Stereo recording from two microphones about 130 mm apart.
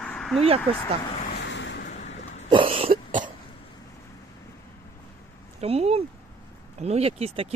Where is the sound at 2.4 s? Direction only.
40° right (ahead or behind).